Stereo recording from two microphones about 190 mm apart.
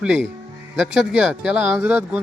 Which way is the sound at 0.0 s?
5° right (ahead or behind).